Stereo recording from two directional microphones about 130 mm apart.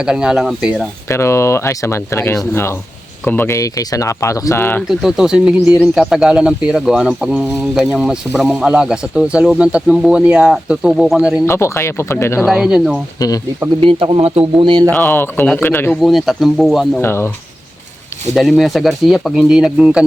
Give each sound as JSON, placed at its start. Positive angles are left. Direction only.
{"t": 0.0, "sound": "speech", "side_deg": -5}
{"t": 1.0, "sound": "speech", "side_deg": 20}
{"t": 4.9, "sound": "speech", "side_deg": -5}
{"t": 11.4, "sound": "speech", "side_deg": 20}
{"t": 12.5, "sound": "speech", "side_deg": -5}
{"t": 13.1, "sound": "speech", "side_deg": 30}
{"t": 13.8, "sound": "speech", "side_deg": -45}
{"t": 14.6, "sound": "speech", "side_deg": -40}
{"t": 14.8, "sound": "speech", "side_deg": 10}
{"t": 16.0, "sound": "speech", "side_deg": 0}
{"t": 17.0, "sound": "speech", "side_deg": 20}
{"t": 18.3, "sound": "speech", "side_deg": 0}